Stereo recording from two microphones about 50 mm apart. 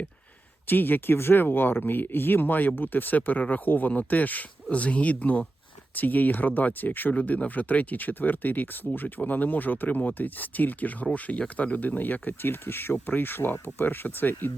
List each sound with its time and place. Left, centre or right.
0.7 s speech: left